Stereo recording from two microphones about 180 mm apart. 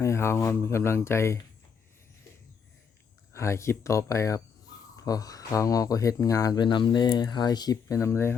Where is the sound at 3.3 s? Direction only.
15° left (ahead or behind).